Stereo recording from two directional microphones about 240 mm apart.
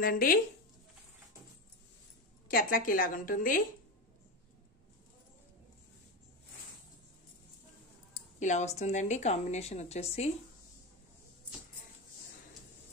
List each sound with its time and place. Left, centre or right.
0.0 s a woman's voice: left
2.4 s a woman's voice: left
8.1 s speech: left